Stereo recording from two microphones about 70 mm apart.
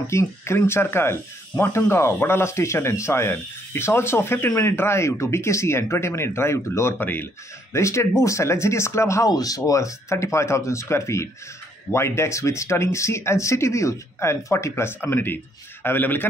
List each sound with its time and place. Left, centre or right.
0.0 s speech: left
7.7 s speech: left
9.3 s speech: left